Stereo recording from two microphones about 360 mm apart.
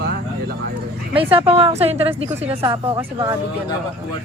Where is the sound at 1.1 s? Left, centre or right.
Centre.